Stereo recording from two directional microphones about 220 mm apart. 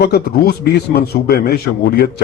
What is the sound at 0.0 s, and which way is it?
A man's voice, 45° left (ahead or behind).